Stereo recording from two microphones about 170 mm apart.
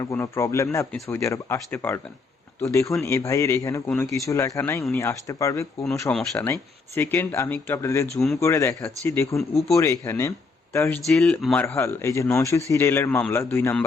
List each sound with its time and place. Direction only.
0.0 s a man's voice: 15° left (ahead or behind)
11.0 s speech: centre (ahead or behind)
11.6 s a man's voice: 15° left (ahead or behind)